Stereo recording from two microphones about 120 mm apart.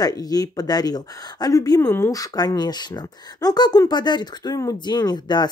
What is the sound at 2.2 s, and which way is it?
Speech, 35° left (ahead or behind).